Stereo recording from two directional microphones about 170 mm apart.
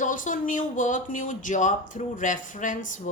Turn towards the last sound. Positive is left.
turn(degrees=50)  # may be behind; listen again after turning